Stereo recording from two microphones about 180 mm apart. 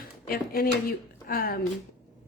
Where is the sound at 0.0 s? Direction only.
55° left (ahead or behind).